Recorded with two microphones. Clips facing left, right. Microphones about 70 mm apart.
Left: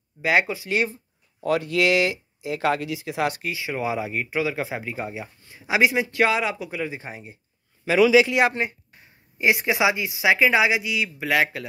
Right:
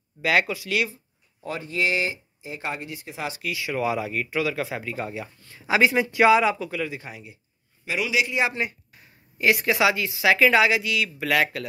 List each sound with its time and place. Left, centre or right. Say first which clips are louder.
0.2 s speech: left 1 dB; left
1.4 s speech: left 5 dB; left
3.4 s speech: right 1 dB; left; by 6.6 s centre
6.6 s speech: even; left
8.5 s speech: left 2 dB; left